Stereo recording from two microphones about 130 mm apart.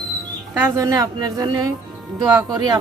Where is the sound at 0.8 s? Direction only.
25° right (ahead or behind).